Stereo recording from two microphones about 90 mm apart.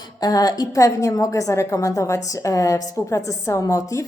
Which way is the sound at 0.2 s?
45° left (ahead or behind).